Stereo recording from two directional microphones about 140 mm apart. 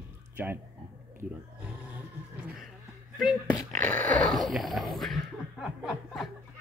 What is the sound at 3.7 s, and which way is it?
Speech, 10° left (ahead or behind).